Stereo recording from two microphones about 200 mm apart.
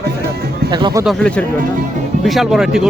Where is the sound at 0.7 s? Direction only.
20° right (ahead or behind).